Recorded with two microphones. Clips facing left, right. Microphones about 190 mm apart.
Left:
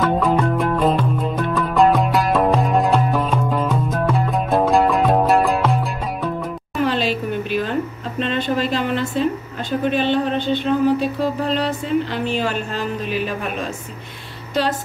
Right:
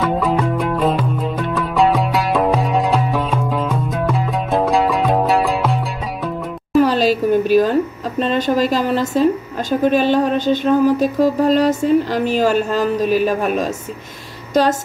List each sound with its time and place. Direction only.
0.0 s music: centre (ahead or behind)
6.8 s a sound: 40° right (ahead or behind)
8.2 s a woman's voice: 40° right (ahead or behind)